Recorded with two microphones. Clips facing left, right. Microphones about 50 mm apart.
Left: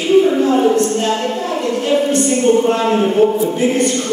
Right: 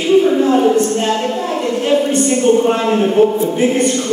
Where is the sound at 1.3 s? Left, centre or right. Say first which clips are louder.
Right 1 dB; centre.